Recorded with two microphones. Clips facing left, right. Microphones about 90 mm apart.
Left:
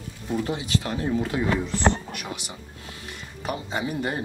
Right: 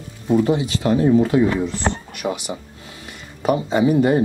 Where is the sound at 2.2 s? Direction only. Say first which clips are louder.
Right 14 dB; 55° right (ahead or behind).